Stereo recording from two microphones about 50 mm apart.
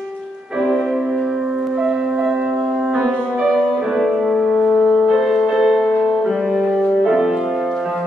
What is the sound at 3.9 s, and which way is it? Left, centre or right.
Music, centre.